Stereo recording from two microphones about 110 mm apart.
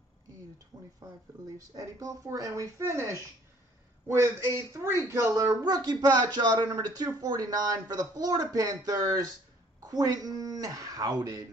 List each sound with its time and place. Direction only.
0.7 s a woman's voice: 35° right (ahead or behind)
4.8 s speech: 25° right (ahead or behind)